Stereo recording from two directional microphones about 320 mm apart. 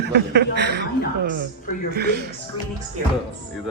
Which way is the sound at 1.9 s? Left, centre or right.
Right.